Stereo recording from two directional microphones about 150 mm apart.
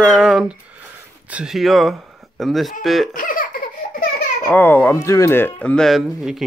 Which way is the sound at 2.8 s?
Centre (ahead or behind).